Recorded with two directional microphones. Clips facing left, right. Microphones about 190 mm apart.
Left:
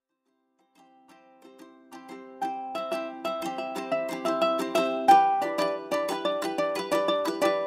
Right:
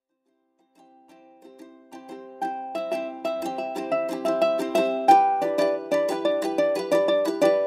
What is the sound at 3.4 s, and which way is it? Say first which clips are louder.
Music: right 4 dB; 40° right (ahead or behind).